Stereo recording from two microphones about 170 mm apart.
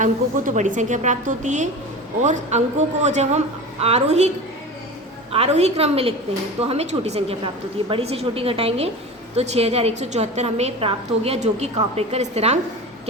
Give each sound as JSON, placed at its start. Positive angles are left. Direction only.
{"t": 0.0, "sound": "a woman's voice", "side_deg": -50}
{"t": 5.3, "sound": "a woman's voice", "side_deg": -40}